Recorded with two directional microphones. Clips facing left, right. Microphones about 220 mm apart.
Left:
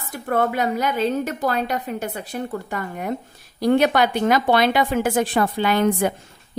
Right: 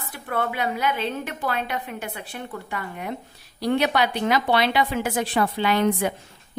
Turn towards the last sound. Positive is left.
turn(degrees=45)  # may be behind; listen again after turning